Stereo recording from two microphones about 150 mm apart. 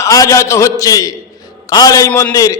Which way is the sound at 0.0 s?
20° left (ahead or behind).